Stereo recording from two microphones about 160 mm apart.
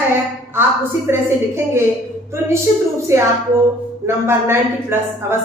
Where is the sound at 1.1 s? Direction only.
15° right (ahead or behind).